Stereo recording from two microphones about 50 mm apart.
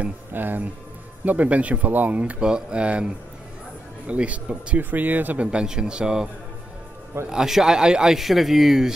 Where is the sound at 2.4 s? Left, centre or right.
Centre; by 5.4 s right.